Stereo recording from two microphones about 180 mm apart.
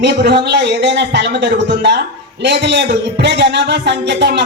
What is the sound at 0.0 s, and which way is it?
Speech, 70° right (ahead or behind).